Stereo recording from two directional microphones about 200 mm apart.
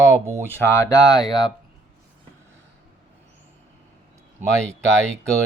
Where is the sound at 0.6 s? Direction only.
15° left (ahead or behind).